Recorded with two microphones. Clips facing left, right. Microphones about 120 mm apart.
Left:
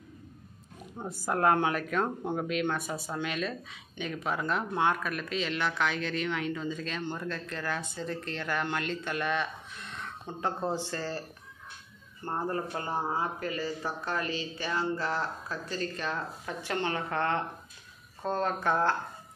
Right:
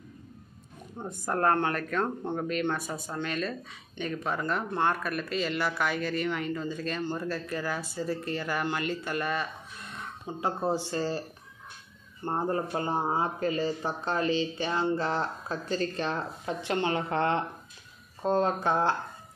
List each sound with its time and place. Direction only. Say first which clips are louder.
0.9 s speech: even; centre (ahead or behind); by 11.2 s 15° right (ahead or behind)
12.3 s speech: right 3 dB; 25° right (ahead or behind)